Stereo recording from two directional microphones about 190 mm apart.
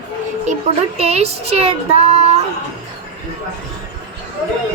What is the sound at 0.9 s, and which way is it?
Child singing, 35° right (ahead or behind).